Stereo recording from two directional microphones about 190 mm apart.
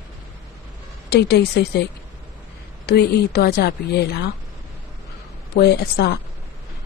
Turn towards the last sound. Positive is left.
turn(degrees=60)  # may be behind; listen again after turning